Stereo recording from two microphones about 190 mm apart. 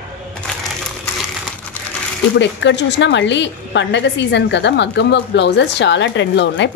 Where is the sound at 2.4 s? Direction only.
70° left (ahead or behind).